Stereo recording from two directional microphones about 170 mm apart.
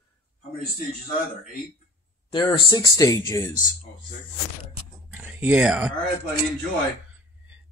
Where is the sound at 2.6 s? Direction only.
20° left (ahead or behind).